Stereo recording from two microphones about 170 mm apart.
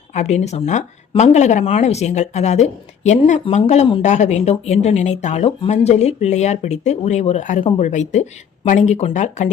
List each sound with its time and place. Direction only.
0.1 s speech: 45° left (ahead or behind)